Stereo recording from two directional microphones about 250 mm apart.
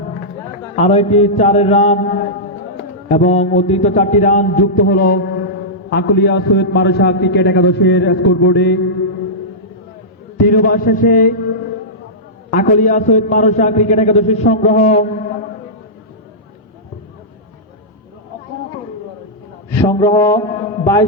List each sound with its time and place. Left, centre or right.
0.8 s a man's voice: left
2.7 s a sound: left
3.6 s a man's voice: left
10.4 s a man's voice: left
12.5 s a man's voice: left
19.9 s mantra: centre